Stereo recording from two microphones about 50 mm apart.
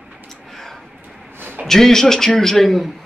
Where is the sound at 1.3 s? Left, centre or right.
Right.